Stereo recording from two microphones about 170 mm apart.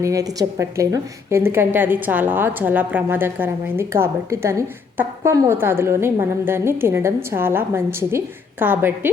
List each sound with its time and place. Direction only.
0.0 s a woman's voice: 20° right (ahead or behind)